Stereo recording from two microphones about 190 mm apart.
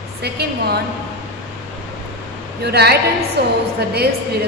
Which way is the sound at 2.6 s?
60° right (ahead or behind).